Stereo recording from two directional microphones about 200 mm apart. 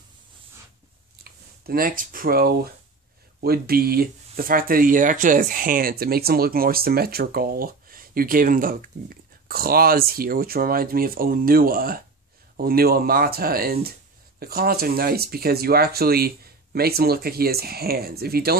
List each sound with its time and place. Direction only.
1.2 s speech: 45° right (ahead or behind)